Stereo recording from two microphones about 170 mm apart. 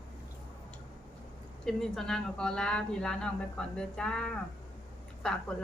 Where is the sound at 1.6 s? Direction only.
5° left (ahead or behind).